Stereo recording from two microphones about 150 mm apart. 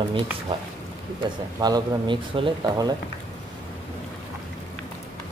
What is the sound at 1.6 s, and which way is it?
Speech, 30° right (ahead or behind).